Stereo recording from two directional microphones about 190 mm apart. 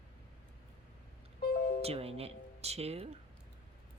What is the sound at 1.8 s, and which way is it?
Speech, 30° right (ahead or behind).